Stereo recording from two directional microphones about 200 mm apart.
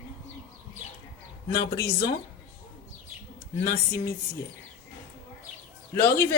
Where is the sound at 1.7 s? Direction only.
15° left (ahead or behind).